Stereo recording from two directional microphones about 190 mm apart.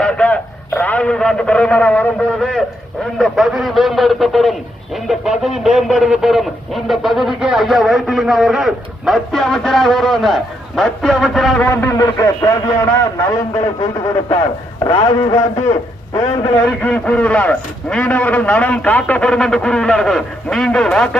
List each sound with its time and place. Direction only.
0.0 s a man's voice: 5° left (ahead or behind)
14.8 s speech: 20° left (ahead or behind)
16.6 s speech: 5° left (ahead or behind)